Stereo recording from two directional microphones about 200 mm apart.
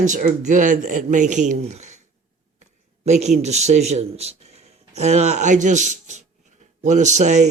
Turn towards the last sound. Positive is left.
turn(degrees=-35)  # may be behind; listen again after turning